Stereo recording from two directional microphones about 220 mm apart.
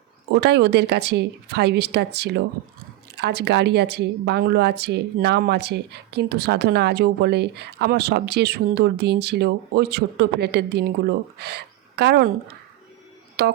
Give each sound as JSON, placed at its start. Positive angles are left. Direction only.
{"t": 0.3, "sound": "a woman's voice", "side_deg": -50}
{"t": 13.4, "sound": "music", "side_deg": -45}